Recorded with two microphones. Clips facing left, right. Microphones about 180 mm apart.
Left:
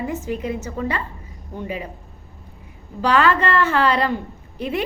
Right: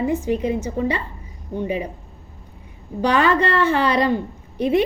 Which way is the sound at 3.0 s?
20° right (ahead or behind).